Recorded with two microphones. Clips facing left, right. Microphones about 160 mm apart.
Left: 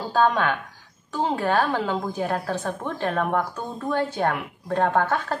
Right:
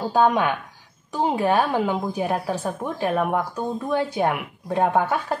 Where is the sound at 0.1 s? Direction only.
15° right (ahead or behind).